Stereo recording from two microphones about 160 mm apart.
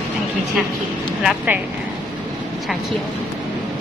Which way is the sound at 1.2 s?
10° right (ahead or behind).